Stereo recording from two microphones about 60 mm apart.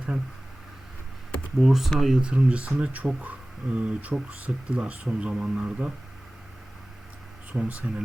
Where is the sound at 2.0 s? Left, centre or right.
Centre.